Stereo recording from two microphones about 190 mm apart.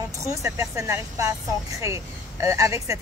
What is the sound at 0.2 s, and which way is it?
Speech, 15° right (ahead or behind).